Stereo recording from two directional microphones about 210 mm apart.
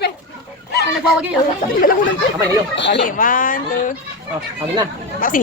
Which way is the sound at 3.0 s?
40° left (ahead or behind).